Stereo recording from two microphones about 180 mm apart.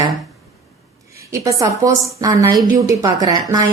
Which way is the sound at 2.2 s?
20° right (ahead or behind).